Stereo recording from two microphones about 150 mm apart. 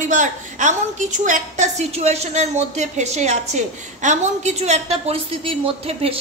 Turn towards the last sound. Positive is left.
turn(degrees=-40)  # may be behind; listen again after turning